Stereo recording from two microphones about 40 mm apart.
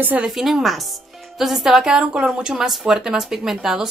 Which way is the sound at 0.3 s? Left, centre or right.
Centre.